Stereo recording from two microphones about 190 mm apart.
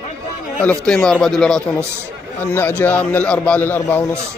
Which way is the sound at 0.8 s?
5° left (ahead or behind).